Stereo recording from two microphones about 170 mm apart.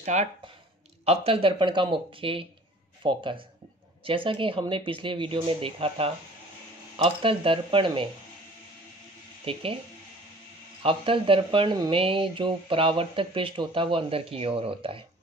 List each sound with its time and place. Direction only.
0.0 s speech: 40° right (ahead or behind)
9.4 s speech: 35° right (ahead or behind)
10.8 s speech: 30° right (ahead or behind)